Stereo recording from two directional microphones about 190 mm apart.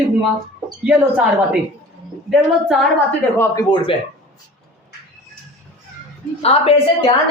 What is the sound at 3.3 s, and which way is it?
Speech, 15° left (ahead or behind).